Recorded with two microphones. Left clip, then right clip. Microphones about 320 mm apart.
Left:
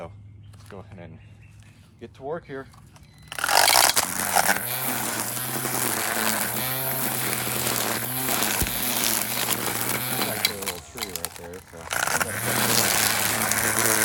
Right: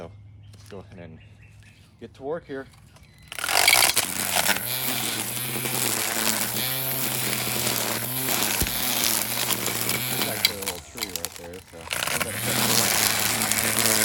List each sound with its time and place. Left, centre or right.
0.7 s speech: centre
2.3 s speech: left
3.2 s a sound: centre